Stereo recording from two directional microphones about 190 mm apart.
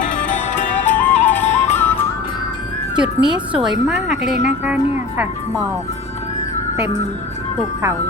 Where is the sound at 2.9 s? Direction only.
5° right (ahead or behind).